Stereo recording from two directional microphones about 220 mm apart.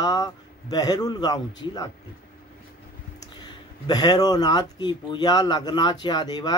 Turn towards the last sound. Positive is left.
turn(degrees=20)  # may be behind; listen again after turning